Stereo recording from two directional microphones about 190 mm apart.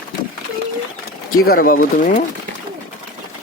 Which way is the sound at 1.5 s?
50° left (ahead or behind).